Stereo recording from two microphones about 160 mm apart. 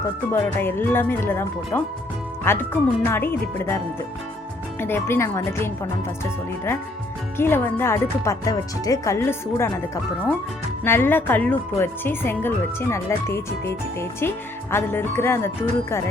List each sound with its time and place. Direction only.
0.4 s speech: 15° left (ahead or behind)
4.8 s speech: 15° left (ahead or behind)
7.3 s speech: 15° left (ahead or behind)